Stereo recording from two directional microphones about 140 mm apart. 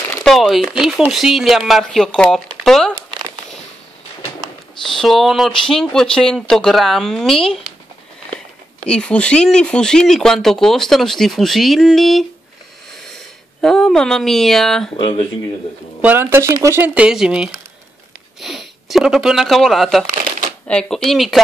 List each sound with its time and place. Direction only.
0.2 s speech: centre (ahead or behind)
4.8 s speech: centre (ahead or behind)
8.8 s speech: 5° left (ahead or behind)
13.6 s speech: 5° left (ahead or behind)
15.0 s speech: 40° left (ahead or behind)
16.0 s speech: 15° right (ahead or behind); by 20.1 s centre (ahead or behind)
20.1 s shuffling cards: 70° right (ahead or behind)
20.6 s speech: 5° left (ahead or behind)